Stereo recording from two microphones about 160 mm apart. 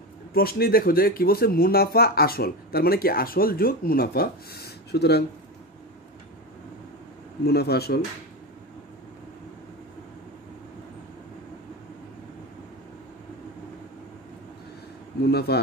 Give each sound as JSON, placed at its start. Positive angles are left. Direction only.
{"t": 0.3, "sound": "speech", "side_deg": 70}
{"t": 7.4, "sound": "speech", "side_deg": 90}
{"t": 15.2, "sound": "a man's voice", "side_deg": 90}